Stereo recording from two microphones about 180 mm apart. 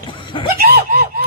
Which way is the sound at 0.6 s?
60° right (ahead or behind).